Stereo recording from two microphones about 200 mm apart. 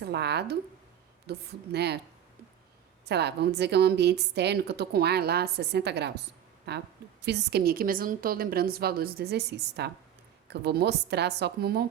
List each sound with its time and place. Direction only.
0.0 s a woman's voice: 55° right (ahead or behind)
3.1 s a woman's voice: 55° right (ahead or behind)